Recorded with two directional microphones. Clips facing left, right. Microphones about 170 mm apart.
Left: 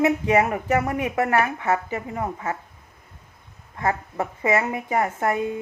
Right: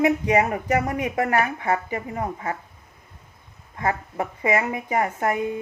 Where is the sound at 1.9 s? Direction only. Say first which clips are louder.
Even; 30° right (ahead or behind).